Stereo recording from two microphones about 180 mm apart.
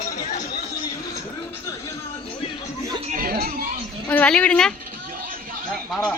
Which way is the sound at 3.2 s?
55° right (ahead or behind).